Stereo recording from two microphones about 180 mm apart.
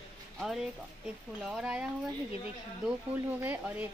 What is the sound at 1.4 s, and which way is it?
Speech, 5° right (ahead or behind).